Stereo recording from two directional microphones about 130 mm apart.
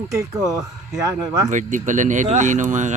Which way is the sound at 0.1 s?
25° right (ahead or behind).